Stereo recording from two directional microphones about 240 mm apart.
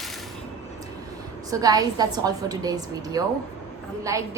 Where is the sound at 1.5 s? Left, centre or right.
Centre.